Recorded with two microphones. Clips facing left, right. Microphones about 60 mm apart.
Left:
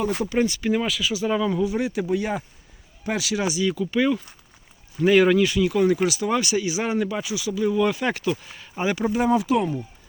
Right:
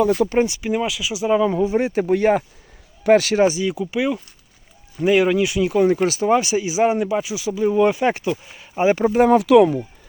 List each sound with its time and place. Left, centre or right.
0.3 s speech: centre; by 3.4 s right
3.4 s speech: right
3.7 s speech: centre
5.6 s speech: right
8.3 s speech: centre
9.1 s speech: right